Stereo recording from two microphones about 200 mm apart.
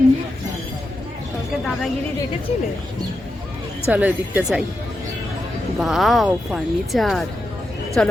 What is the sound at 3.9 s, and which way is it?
Speech, 5° right (ahead or behind).